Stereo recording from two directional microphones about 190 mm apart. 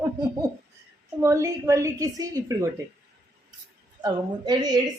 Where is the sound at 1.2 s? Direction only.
15° right (ahead or behind).